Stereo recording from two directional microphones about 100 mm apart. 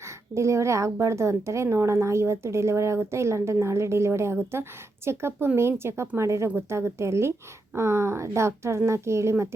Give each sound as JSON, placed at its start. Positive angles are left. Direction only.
{"t": 0.3, "sound": "a woman's voice", "side_deg": -30}